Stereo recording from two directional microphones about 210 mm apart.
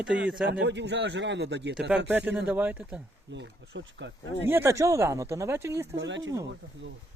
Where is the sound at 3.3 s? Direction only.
55° right (ahead or behind).